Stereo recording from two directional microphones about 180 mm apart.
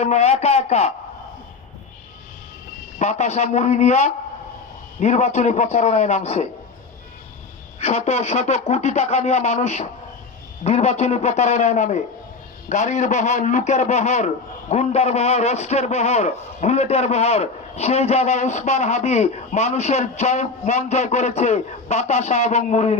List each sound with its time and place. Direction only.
0.0 s a man's voice: 35° left (ahead or behind)
3.0 s a man's voice: 40° left (ahead or behind)
7.8 s a man's voice: 35° left (ahead or behind)